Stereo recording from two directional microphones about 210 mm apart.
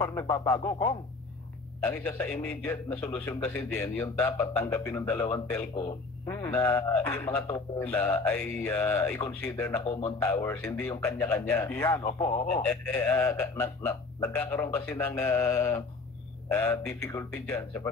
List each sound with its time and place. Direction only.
0.0 s a man's voice: 15° left (ahead or behind)
2.0 s a man's voice: 5° left (ahead or behind)